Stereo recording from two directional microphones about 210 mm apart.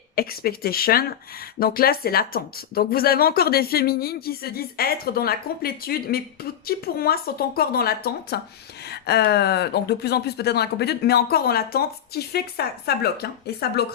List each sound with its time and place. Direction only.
0.2 s speech: 45° left (ahead or behind)